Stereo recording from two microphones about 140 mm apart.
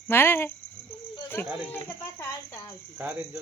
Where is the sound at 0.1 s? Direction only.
15° left (ahead or behind).